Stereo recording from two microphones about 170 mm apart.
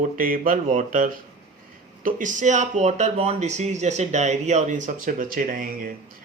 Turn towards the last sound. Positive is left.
turn(degrees=-55)  # may be behind; listen again after turning